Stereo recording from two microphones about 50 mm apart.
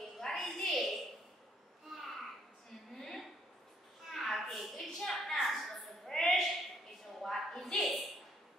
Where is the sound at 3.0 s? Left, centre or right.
Centre.